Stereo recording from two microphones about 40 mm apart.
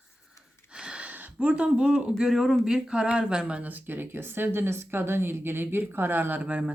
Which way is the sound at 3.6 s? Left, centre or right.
Right.